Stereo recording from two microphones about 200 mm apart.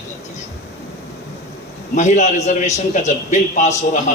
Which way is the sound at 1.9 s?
35° left (ahead or behind).